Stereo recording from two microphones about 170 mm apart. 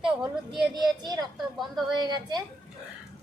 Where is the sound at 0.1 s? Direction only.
5° right (ahead or behind).